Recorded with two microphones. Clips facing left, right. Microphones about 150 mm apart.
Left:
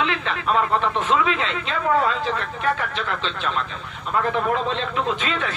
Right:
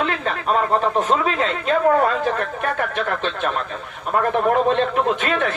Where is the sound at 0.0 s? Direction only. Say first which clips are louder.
Right 2 dB; 45° right (ahead or behind).